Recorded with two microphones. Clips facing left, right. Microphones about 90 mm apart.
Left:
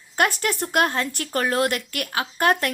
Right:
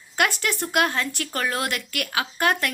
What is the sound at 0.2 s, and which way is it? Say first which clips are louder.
A woman's voice: left 2 dB; 40° left (ahead or behind).